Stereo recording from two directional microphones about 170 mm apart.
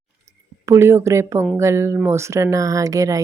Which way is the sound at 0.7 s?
15° right (ahead or behind).